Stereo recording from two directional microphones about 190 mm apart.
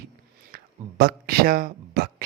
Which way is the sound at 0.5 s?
55° right (ahead or behind).